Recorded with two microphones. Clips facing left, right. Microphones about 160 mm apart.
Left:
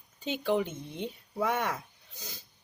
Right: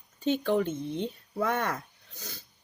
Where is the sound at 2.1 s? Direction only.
15° left (ahead or behind).